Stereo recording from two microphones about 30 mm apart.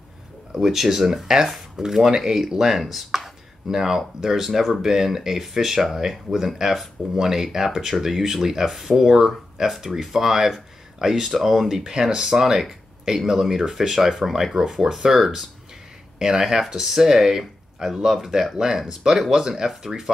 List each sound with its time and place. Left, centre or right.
0.7 s speech: centre
2.8 s speech: centre
3.6 s speech: centre